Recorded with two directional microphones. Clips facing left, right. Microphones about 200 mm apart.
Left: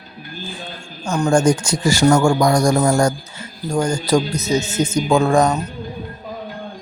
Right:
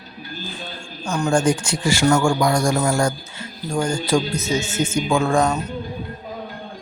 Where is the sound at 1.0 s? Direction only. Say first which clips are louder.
Left 3 dB; 40° left (ahead or behind).